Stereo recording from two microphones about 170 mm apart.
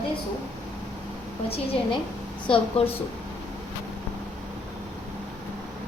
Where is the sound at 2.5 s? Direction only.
35° left (ahead or behind).